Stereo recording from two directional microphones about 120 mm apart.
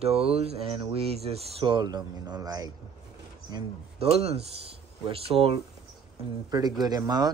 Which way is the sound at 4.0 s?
60° right (ahead or behind).